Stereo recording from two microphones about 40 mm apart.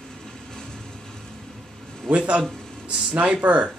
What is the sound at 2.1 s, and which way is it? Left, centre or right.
Speech, right.